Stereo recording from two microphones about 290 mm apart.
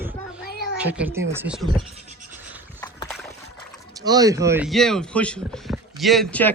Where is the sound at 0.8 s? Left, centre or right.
Centre.